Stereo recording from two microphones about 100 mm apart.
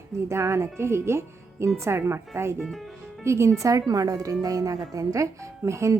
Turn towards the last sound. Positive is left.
turn(degrees=-30)  # may be behind; listen again after turning